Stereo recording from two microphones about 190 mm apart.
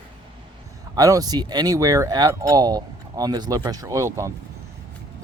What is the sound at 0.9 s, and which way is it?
Speech, 20° right (ahead or behind).